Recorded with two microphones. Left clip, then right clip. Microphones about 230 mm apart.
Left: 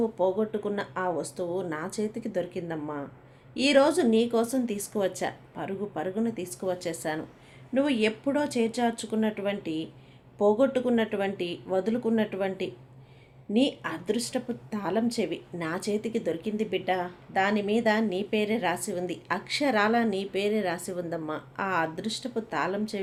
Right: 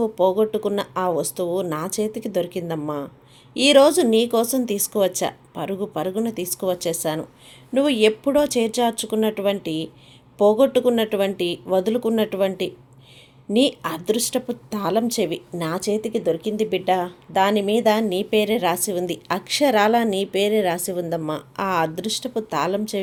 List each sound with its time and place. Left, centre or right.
0.0 s a woman's voice: right